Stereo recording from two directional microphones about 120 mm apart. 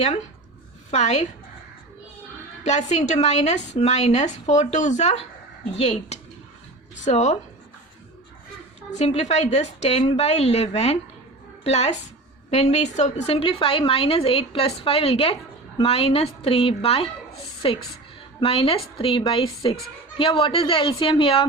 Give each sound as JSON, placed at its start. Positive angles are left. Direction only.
{"t": 0.9, "sound": "a woman's voice", "side_deg": 70}
{"t": 2.6, "sound": "a woman's voice", "side_deg": 70}
{"t": 9.0, "sound": "a woman's voice", "side_deg": 65}